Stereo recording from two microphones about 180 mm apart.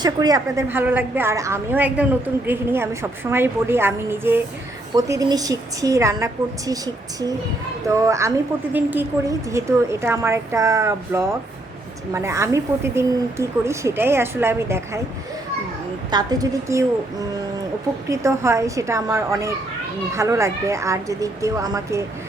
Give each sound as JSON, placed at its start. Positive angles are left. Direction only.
{"t": 0.0, "sound": "a woman's voice", "side_deg": -20}
{"t": 16.0, "sound": "a woman's voice", "side_deg": -20}
{"t": 18.1, "sound": "a woman's voice", "side_deg": -15}